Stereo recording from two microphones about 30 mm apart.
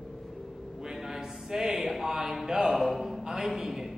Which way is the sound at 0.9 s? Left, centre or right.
Centre.